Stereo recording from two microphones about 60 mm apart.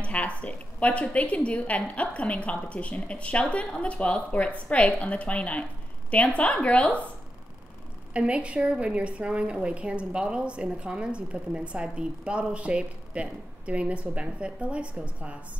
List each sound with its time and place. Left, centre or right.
0.0 s a woman's voice: left
8.1 s a woman's voice: centre